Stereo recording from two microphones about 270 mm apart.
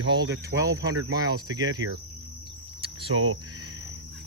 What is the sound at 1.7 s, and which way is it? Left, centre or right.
Cricket, right.